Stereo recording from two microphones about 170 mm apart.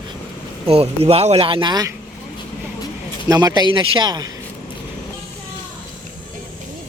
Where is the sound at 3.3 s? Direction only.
25° right (ahead or behind).